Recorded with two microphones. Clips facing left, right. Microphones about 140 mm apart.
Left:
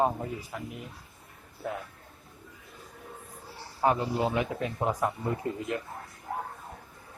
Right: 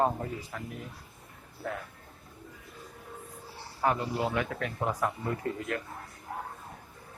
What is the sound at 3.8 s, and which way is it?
A man's voice, 20° left (ahead or behind).